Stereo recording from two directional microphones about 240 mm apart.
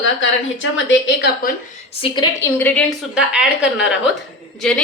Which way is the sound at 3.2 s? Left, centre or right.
Centre.